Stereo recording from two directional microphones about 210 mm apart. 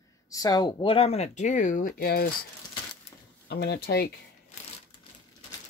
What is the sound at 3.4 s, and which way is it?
Speech, 50° left (ahead or behind).